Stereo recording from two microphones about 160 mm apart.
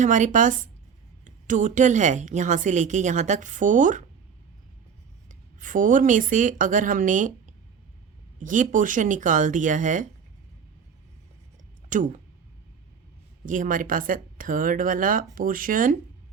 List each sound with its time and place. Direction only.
0.0 s a woman's voice: 50° right (ahead or behind)
5.3 s a woman's voice: 55° right (ahead or behind)
11.9 s speech: 55° right (ahead or behind)
13.4 s speech: 55° right (ahead or behind)